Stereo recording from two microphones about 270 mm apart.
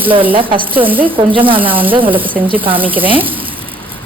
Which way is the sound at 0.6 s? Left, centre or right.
Centre.